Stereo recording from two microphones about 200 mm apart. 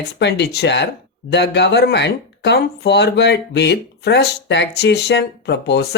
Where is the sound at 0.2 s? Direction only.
55° left (ahead or behind).